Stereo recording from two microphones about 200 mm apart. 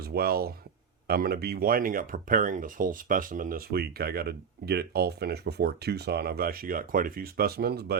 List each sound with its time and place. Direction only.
0.0 s speech: 50° right (ahead or behind)